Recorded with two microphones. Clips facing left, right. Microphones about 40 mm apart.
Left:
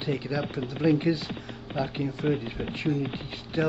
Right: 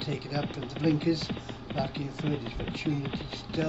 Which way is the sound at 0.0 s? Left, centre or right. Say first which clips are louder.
Left 4 dB; centre.